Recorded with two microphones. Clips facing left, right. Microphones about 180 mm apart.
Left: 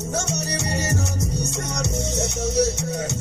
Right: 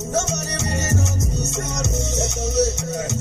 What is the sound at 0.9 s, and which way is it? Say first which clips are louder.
Music: right 2 dB; 25° right (ahead or behind).